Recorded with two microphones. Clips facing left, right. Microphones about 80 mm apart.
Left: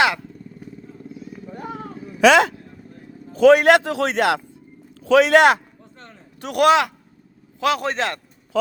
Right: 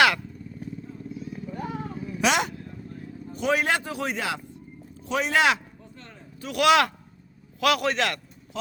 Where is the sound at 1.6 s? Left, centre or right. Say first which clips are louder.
Left 2 dB; left.